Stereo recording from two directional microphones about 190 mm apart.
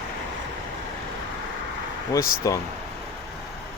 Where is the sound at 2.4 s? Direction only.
15° left (ahead or behind).